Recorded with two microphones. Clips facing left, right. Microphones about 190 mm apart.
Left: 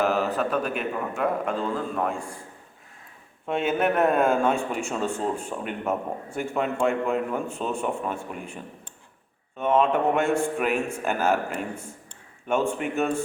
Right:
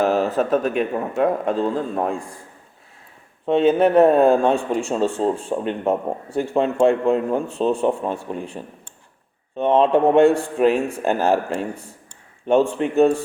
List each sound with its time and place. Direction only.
0.0 s a sound: 40° right (ahead or behind)
0.3 s a man's voice: 40° right (ahead or behind)
2.1 s a man's voice: 10° left (ahead or behind)
3.4 s a man's voice: 30° right (ahead or behind)